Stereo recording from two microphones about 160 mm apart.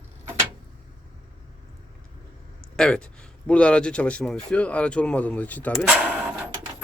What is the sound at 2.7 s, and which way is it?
Speech, 5° left (ahead or behind).